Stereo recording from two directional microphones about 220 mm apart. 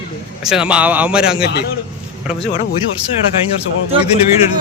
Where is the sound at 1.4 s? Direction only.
50° left (ahead or behind).